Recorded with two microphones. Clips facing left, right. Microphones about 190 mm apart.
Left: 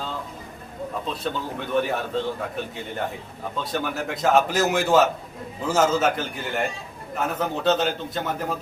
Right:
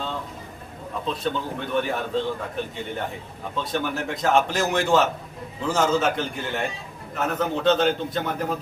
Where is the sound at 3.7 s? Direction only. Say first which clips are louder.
Right 1 dB; centre (ahead or behind).